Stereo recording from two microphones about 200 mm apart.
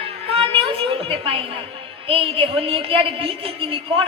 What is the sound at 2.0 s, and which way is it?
A woman's voice, 25° right (ahead or behind).